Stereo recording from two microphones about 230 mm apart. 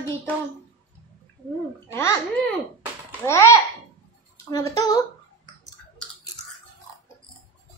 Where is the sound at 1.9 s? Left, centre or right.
Centre.